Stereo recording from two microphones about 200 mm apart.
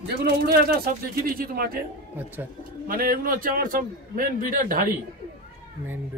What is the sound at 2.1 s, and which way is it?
Speech, 10° right (ahead or behind).